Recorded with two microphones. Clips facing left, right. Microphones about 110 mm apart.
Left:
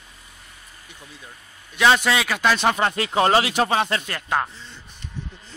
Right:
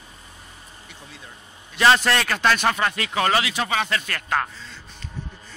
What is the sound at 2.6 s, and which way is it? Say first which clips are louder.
Speech: left 2 dB; 25° left (ahead or behind).